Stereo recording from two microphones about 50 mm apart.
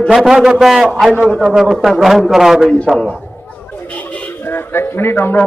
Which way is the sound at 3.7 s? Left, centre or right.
Left.